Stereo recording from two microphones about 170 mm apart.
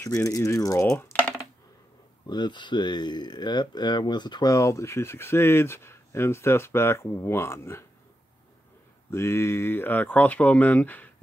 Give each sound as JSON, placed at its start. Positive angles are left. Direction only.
{"t": 0.0, "sound": "speech", "side_deg": 20}
{"t": 2.2, "sound": "speech", "side_deg": 25}
{"t": 9.1, "sound": "speech", "side_deg": 15}